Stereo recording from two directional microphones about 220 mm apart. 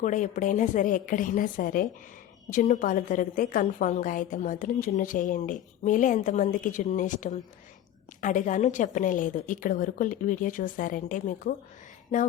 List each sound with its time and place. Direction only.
0.0 s a woman's voice: 35° left (ahead or behind)